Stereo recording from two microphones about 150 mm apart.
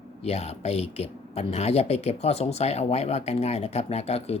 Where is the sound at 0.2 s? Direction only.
45° left (ahead or behind).